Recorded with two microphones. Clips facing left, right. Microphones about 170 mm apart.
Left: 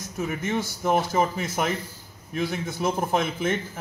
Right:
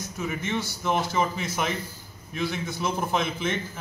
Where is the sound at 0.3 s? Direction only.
45° left (ahead or behind).